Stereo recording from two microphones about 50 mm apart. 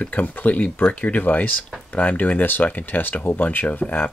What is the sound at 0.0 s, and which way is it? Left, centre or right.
Speech, left.